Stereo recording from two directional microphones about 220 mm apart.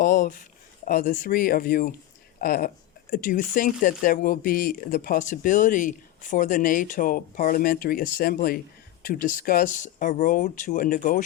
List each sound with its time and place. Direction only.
0.0 s speech: 35° left (ahead or behind)